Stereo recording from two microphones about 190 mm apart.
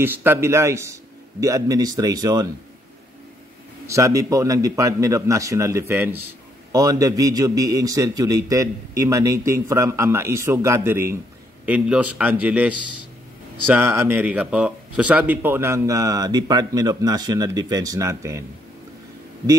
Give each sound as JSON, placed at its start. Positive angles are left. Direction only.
{"t": 0.0, "sound": "speech", "side_deg": -10}
{"t": 3.8, "sound": "speech", "side_deg": -15}